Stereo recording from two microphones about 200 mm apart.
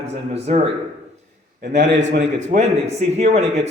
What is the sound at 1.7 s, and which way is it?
Speech, 60° right (ahead or behind).